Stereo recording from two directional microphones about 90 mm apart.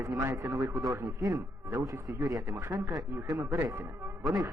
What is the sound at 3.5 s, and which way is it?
Speech, 25° right (ahead or behind).